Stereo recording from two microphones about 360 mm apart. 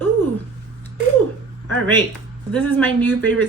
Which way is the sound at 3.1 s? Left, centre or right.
Right.